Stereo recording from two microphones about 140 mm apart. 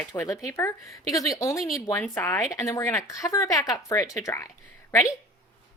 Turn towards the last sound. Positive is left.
turn(degrees=20)  # may be behind; listen again after turning